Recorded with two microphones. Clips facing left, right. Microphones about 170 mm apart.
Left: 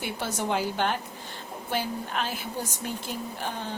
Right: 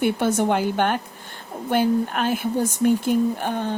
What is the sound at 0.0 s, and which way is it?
Speech, 55° right (ahead or behind).